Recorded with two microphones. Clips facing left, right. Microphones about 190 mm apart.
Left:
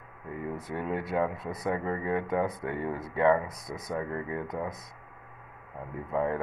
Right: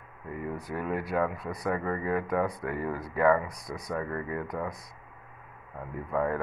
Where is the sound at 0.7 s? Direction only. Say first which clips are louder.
Even; 25° left (ahead or behind).